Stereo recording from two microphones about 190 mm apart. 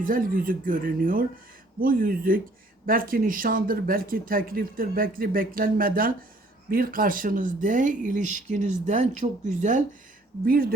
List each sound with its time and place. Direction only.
0.0 s speech: 45° right (ahead or behind)
10.4 s speech: 50° right (ahead or behind)